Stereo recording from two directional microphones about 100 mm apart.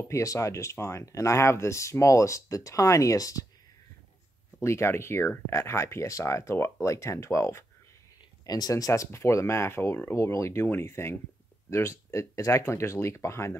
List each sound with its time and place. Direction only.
0.1 s speech: 30° left (ahead or behind)
4.6 s speech: 25° left (ahead or behind)
8.5 s speech: 40° left (ahead or behind)